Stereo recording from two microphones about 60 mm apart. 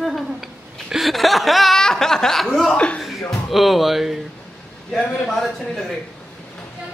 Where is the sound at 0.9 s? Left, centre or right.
Centre.